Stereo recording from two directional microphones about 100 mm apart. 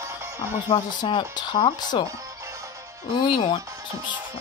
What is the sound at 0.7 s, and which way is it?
Speech, 55° left (ahead or behind).